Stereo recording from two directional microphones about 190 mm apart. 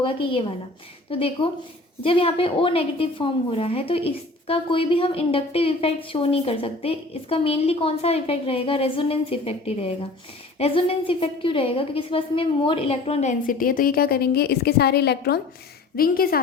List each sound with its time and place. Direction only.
0.0 s a woman's voice: 25° left (ahead or behind); by 16.4 s 50° left (ahead or behind)